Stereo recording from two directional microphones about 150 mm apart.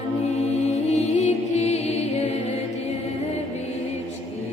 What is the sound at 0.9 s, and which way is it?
Music, 50° left (ahead or behind).